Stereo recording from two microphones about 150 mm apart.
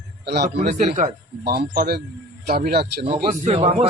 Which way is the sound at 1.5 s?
85° right.